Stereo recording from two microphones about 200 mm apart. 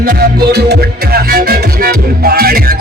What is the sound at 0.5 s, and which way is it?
Music, 50° right (ahead or behind).